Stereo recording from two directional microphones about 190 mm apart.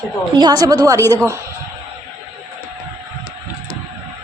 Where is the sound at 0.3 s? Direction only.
20° right (ahead or behind).